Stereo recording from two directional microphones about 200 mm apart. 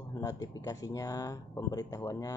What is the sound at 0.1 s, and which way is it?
Speech, 15° left (ahead or behind).